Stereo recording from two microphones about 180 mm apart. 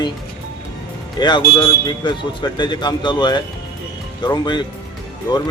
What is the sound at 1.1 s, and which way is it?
Speech, 25° left (ahead or behind).